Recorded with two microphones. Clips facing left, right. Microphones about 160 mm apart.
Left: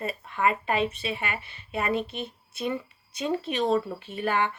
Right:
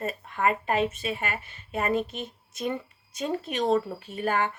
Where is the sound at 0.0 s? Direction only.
45° right (ahead or behind).